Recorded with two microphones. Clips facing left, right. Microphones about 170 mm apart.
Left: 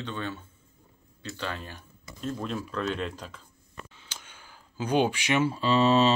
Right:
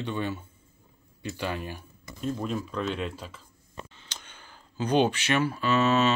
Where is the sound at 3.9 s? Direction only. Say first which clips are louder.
Right 1 dB; 10° left (ahead or behind).